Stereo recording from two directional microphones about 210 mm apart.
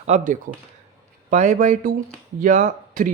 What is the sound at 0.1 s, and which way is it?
Speech, 35° right (ahead or behind).